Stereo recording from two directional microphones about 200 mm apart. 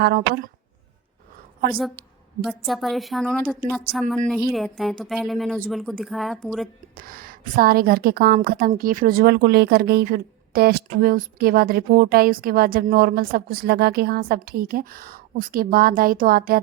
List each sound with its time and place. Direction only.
0.0 s a woman's voice: 50° right (ahead or behind)
2.4 s a woman's voice: centre (ahead or behind)
6.9 s a woman's voice: 45° right (ahead or behind)